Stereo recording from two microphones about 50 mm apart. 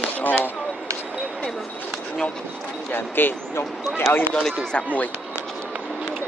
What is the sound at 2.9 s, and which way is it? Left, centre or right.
Speech, left.